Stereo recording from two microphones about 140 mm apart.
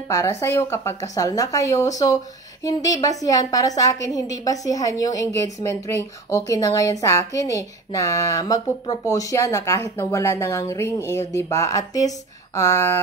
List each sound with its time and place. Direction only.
0.1 s a woman's voice: 20° left (ahead or behind)